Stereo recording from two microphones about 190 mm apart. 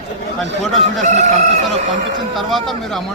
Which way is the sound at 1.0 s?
40° right (ahead or behind).